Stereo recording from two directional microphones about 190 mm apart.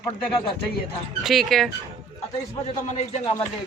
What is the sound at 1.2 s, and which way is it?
Speech, centre (ahead or behind).